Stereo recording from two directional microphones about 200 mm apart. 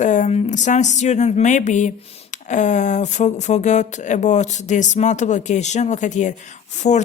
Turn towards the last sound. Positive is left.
turn(degrees=35)  # may be behind; listen again after turning